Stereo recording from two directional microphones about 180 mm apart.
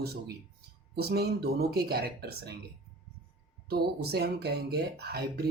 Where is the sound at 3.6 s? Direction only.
60° right (ahead or behind).